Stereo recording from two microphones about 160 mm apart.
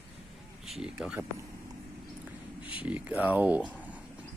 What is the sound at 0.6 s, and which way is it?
Speech, 5° right (ahead or behind).